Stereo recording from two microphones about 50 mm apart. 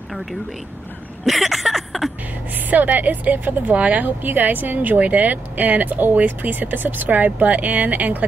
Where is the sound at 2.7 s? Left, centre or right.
Right.